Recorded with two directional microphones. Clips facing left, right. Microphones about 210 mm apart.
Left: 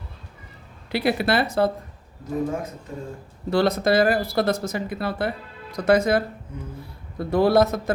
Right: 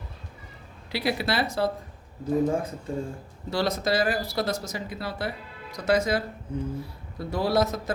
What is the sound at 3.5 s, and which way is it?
Speech, 55° left (ahead or behind).